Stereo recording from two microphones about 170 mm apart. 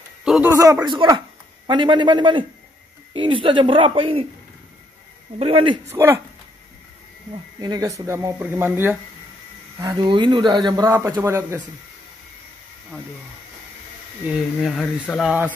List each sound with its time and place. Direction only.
0.2 s a sound: 5° right (ahead or behind)
0.5 s speech: 20° right (ahead or behind)
5.4 s speech: 30° right (ahead or behind)
5.9 s speech: 15° right (ahead or behind)
7.6 s speech: 20° right (ahead or behind)
14.3 s speech: centre (ahead or behind)